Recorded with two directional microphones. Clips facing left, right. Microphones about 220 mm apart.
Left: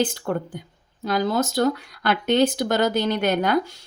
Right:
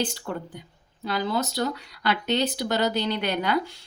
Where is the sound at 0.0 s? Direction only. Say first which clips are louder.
Left 6 dB; 50° left (ahead or behind).